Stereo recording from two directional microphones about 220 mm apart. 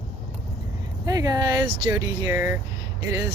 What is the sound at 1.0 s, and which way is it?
Speech, 15° right (ahead or behind).